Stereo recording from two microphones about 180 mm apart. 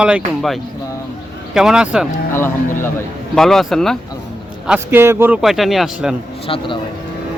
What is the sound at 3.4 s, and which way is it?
Speech, centre (ahead or behind).